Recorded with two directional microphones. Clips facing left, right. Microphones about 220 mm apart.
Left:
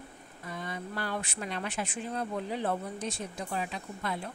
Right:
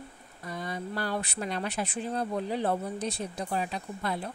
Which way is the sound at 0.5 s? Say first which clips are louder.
Right 3 dB; 35° right (ahead or behind).